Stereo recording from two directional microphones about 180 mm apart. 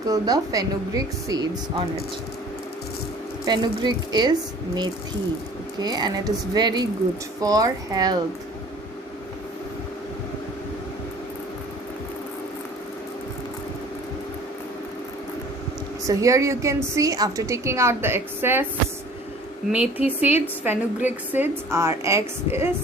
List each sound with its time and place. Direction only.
0.1 s a woman's voice: 20° right (ahead or behind)
3.4 s a woman's voice: 25° right (ahead or behind)
16.0 s a woman's voice: 15° right (ahead or behind)
19.7 s a woman's voice: 10° right (ahead or behind)